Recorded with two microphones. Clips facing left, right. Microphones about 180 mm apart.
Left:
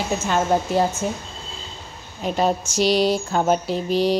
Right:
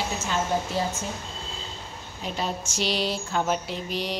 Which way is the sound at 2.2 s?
50° left (ahead or behind).